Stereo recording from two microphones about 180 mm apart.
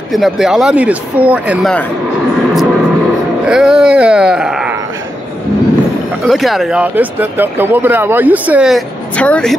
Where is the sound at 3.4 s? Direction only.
5° right (ahead or behind).